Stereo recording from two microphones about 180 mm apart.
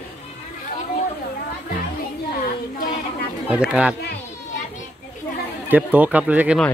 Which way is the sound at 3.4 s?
5° right (ahead or behind).